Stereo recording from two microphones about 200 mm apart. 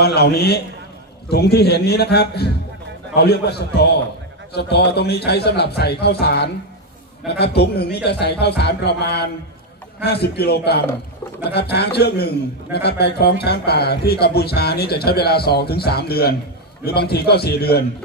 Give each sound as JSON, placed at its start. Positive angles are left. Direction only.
{"t": 0.0, "sound": "a man's voice", "side_deg": 55}